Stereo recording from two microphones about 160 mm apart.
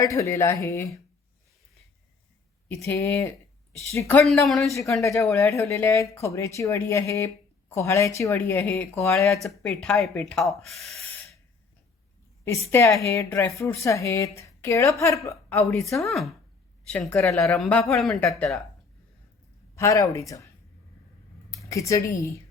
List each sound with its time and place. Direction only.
0.0 s a woman's voice: 20° left (ahead or behind)
2.6 s speech: 15° left (ahead or behind)
4.4 s speech: centre (ahead or behind)
4.7 s a woman's voice: 20° left (ahead or behind)
9.3 s speech: 5° left (ahead or behind)
12.7 s a woman's voice: 15° left (ahead or behind)
16.0 s speech: centre (ahead or behind)
19.7 s a woman's voice: 20° left (ahead or behind)
21.5 s a woman's voice: 20° left (ahead or behind)